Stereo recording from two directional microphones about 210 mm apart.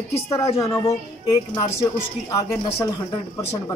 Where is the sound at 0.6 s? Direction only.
15° left (ahead or behind).